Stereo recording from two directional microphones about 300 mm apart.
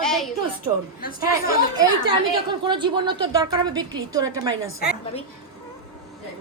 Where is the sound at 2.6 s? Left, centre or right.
Centre.